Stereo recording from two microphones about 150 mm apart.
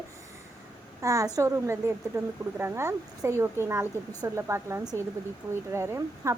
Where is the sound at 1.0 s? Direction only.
25° right (ahead or behind).